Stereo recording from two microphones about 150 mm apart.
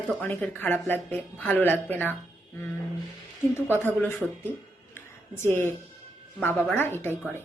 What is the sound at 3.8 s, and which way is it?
A woman's voice, 15° left (ahead or behind).